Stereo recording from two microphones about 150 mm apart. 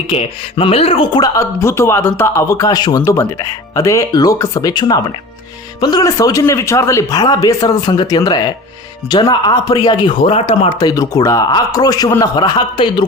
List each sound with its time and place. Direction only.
0.1 s speech: 35° left (ahead or behind)
1.4 s a man's voice: 20° left (ahead or behind)